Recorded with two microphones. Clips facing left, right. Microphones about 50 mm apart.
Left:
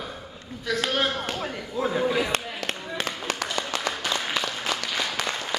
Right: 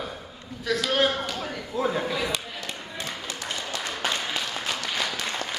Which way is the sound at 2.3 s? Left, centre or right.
Left.